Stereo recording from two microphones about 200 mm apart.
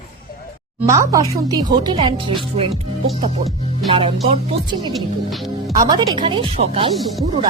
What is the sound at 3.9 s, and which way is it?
Speech, 30° right (ahead or behind).